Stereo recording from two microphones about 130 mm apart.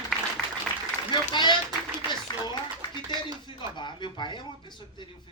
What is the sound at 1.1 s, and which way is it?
Speech, 35° left (ahead or behind).